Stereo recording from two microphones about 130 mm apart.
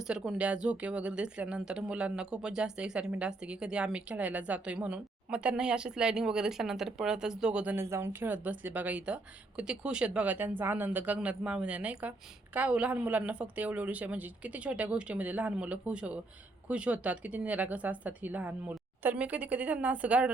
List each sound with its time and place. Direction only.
0.0 s speech: 5° right (ahead or behind)